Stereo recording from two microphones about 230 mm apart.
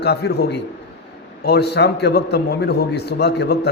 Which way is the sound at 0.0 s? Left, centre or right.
Left.